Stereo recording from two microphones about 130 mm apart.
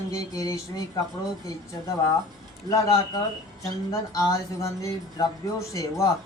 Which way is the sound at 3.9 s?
25° left (ahead or behind).